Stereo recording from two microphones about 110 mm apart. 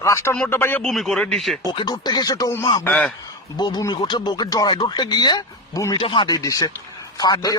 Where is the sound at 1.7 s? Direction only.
40° left (ahead or behind).